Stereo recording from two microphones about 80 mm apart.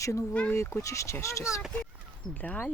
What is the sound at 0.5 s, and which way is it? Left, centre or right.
Speech, left.